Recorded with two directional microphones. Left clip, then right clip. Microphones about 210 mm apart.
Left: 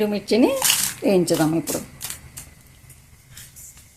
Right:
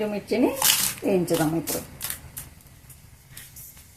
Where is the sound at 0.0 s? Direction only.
40° left (ahead or behind).